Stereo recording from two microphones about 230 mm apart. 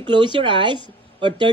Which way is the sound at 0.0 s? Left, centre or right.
Right.